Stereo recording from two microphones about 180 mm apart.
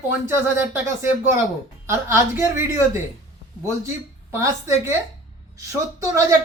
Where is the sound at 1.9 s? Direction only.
10° right (ahead or behind).